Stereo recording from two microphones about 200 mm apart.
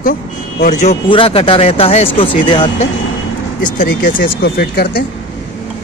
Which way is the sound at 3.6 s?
45° left (ahead or behind).